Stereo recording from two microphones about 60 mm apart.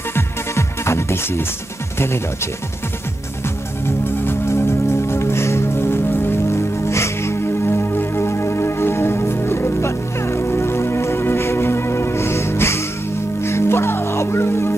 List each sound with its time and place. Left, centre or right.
0.1 s music: left
3.8 s music: left